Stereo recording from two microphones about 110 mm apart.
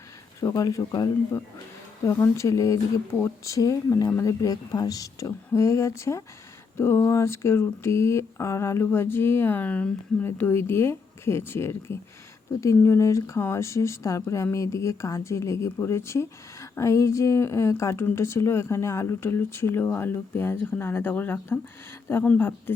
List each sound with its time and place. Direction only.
0.3 s speech: 30° left (ahead or behind)
2.1 s speech: 25° left (ahead or behind)